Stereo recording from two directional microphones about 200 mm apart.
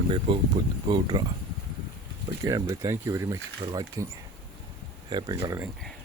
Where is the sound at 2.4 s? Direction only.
15° right (ahead or behind).